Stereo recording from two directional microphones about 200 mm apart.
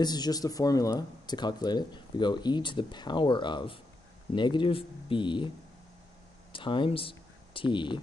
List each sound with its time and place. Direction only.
0.0 s speech: 20° left (ahead or behind)
6.5 s speech: 25° left (ahead or behind)